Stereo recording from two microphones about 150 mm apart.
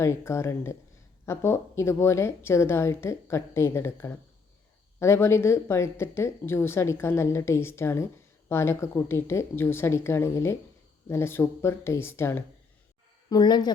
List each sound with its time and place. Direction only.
0.0 s speech: 20° left (ahead or behind)
13.3 s speech: 30° left (ahead or behind)